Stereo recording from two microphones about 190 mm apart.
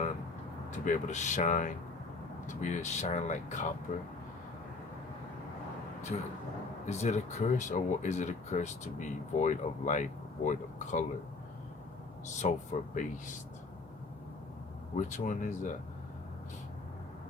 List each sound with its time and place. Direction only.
0.7 s speech: 40° left (ahead or behind)
6.8 s speech: 35° left (ahead or behind)
12.4 s speech: 40° left (ahead or behind)
14.9 s speech: 40° left (ahead or behind)